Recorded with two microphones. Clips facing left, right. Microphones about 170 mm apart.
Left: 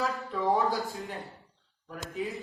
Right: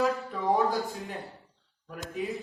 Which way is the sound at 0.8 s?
Centre (ahead or behind).